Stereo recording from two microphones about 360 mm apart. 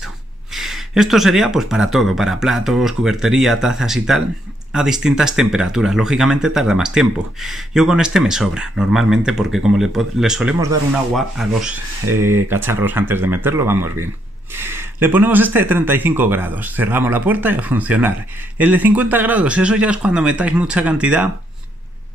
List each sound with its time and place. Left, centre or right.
0.0 s speech: centre